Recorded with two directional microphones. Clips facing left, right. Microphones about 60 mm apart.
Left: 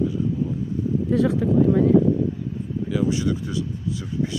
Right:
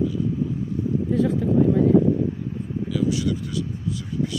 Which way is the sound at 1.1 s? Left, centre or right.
Left.